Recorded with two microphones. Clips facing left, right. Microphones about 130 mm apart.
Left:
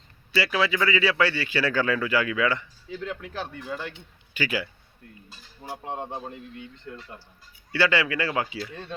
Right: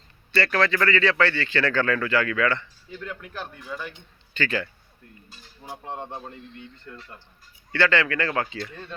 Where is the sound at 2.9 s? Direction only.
90° left.